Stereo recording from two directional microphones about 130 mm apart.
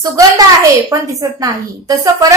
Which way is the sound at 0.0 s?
25° right (ahead or behind).